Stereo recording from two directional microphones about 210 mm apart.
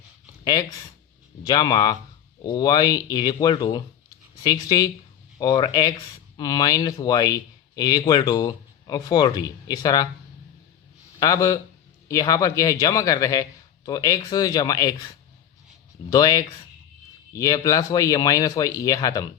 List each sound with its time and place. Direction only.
0.4 s speech: 15° left (ahead or behind)
11.2 s speech: 15° left (ahead or behind)
16.0 s speech: 15° left (ahead or behind)